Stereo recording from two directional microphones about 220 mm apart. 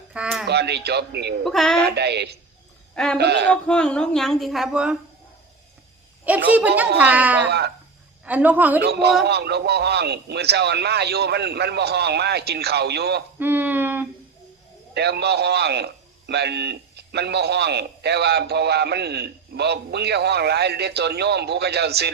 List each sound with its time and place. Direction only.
0.1 s a sound: 5° right (ahead or behind)
0.4 s a man's voice: 50° right (ahead or behind)
1.5 s speech: centre (ahead or behind)
2.0 s a man's voice: 50° right (ahead or behind)
2.9 s a man's voice: 5° left (ahead or behind)
3.2 s a man's voice: 50° right (ahead or behind)
3.5 s speech: 5° left (ahead or behind)
6.2 s speech: 5° right (ahead or behind)
7.3 s a man's voice: 50° right (ahead or behind)
8.2 s speech: 5° right (ahead or behind)
8.8 s a man's voice: 50° right (ahead or behind)
13.4 s a sound: 10° right (ahead or behind)
14.9 s a man's voice: 50° right (ahead or behind)